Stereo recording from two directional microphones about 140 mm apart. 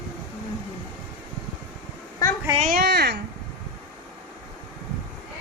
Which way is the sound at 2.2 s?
25° left (ahead or behind).